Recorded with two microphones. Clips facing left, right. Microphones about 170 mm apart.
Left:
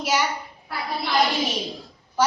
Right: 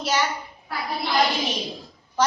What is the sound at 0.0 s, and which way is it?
Speech, 10° left (ahead or behind).